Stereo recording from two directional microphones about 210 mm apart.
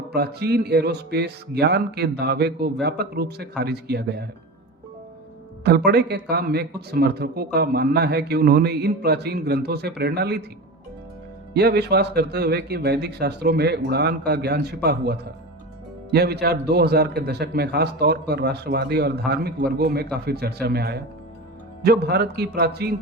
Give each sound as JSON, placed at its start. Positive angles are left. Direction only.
{"t": 0.1, "sound": "speech", "side_deg": -50}
{"t": 5.6, "sound": "speech", "side_deg": -50}
{"t": 11.5, "sound": "speech", "side_deg": -50}